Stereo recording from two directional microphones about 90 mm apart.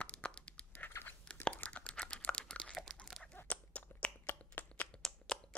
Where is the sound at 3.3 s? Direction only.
15° left (ahead or behind).